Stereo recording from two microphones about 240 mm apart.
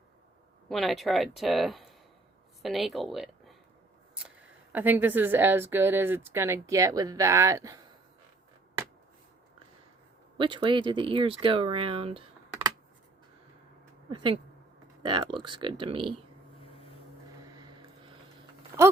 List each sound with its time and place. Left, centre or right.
0.7 s speech: centre
4.7 s speech: centre
10.3 s speech: right
14.1 s speech: centre
17.6 s vehicle: centre
18.7 s speech: centre